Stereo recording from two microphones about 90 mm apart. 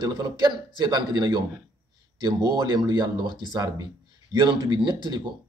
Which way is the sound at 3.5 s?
45° right (ahead or behind).